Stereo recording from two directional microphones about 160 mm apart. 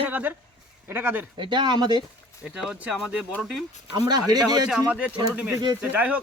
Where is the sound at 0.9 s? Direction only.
15° right (ahead or behind).